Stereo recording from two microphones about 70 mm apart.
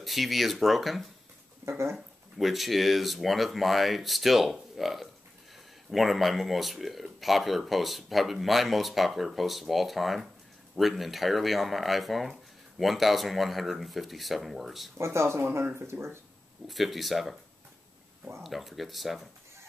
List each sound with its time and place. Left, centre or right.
0.0 s speech: centre
1.7 s speech: right
2.0 s speech: centre
15.0 s speech: right
16.6 s speech: centre
18.4 s speech: centre